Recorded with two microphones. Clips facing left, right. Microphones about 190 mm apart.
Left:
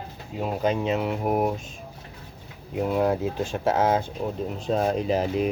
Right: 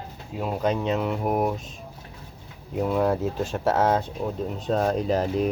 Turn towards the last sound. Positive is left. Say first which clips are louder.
# even
turn(degrees=5)  # may be behind; listen again after turning